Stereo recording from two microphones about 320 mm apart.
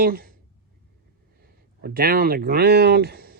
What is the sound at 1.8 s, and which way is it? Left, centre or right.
Speech, right.